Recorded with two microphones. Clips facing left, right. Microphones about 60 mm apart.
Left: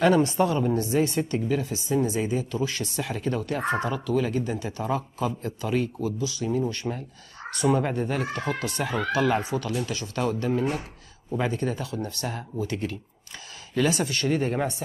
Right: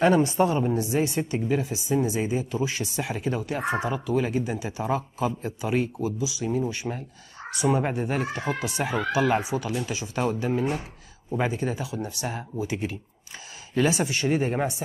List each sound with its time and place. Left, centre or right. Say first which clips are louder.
0.0 s a woman's voice: even; right